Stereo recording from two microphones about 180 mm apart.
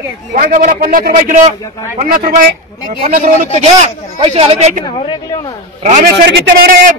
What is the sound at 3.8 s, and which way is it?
Speech, 35° right (ahead or behind).